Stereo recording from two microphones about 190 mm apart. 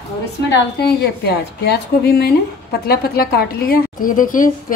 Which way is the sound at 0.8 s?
60° left (ahead or behind).